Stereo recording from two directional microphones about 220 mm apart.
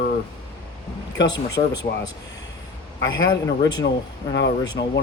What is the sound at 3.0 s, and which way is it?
Speech, 60° left (ahead or behind).